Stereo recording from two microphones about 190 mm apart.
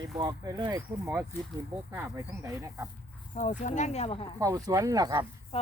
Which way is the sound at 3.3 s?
40° left (ahead or behind).